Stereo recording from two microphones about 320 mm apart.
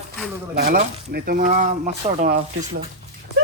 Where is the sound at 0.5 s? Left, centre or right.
Right.